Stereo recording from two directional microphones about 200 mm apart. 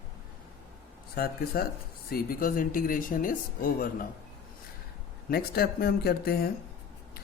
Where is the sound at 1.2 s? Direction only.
50° left (ahead or behind).